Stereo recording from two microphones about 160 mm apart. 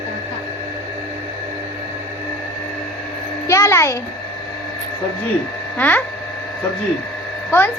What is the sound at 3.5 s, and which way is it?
Speech, 20° left (ahead or behind).